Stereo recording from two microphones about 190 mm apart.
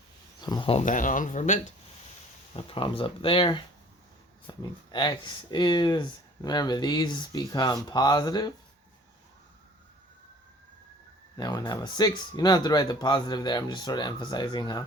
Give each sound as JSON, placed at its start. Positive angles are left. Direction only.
{"t": 0.4, "sound": "speech", "side_deg": 25}
{"t": 2.6, "sound": "speech", "side_deg": 30}
{"t": 11.3, "sound": "speech", "side_deg": 20}